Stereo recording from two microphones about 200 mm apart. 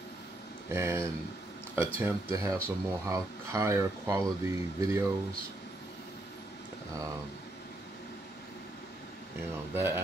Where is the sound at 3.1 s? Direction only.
15° right (ahead or behind).